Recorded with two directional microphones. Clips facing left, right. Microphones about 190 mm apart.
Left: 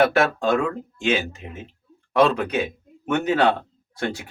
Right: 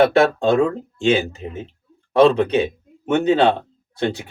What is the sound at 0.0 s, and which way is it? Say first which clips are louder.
Speech: right 4 dB; 30° right (ahead or behind).